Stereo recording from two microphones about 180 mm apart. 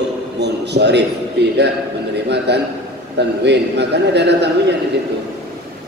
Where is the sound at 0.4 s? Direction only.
70° right (ahead or behind).